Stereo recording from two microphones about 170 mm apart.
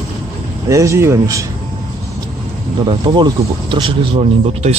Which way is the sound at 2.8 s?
30° right (ahead or behind).